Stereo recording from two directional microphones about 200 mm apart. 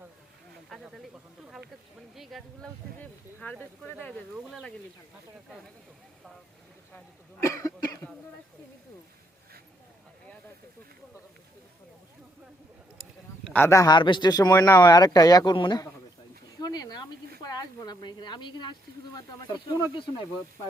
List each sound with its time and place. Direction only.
0.7 s speech: centre (ahead or behind)
4.4 s speech: centre (ahead or behind)
6.9 s speech: 10° left (ahead or behind)
13.0 s speech: 5° left (ahead or behind); by 15.9 s 20° left (ahead or behind)
16.6 s a sound: 20° left (ahead or behind)
17.4 s speech: 20° left (ahead or behind)